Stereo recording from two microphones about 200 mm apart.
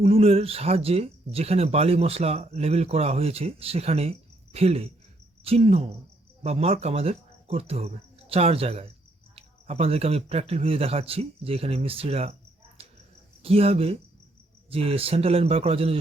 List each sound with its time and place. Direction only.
0.0 s a man's voice: 30° right (ahead or behind)